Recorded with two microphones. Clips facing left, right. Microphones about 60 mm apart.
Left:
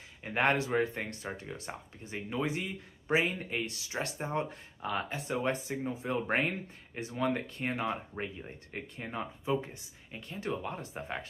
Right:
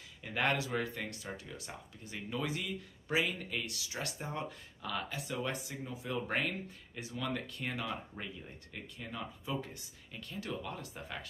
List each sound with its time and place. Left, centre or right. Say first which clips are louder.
0.2 s speech: left 4 dB; left